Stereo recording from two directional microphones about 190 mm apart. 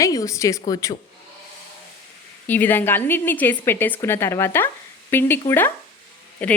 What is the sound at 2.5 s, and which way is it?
Speech, 10° left (ahead or behind).